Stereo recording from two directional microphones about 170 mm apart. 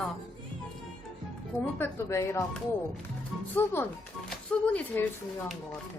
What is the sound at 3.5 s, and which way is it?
A woman's voice, 10° left (ahead or behind).